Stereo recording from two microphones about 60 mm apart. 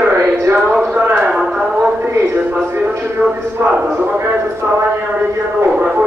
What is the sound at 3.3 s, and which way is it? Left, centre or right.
Speech, right.